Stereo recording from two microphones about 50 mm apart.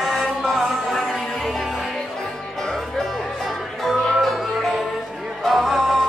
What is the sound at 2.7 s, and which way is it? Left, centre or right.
Music, centre.